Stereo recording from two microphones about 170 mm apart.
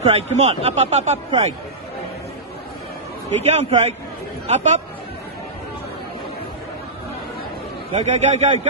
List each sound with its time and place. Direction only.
0.0 s speech: 35° right (ahead or behind)
3.4 s speech: 40° right (ahead or behind)
7.9 s speech: 40° right (ahead or behind)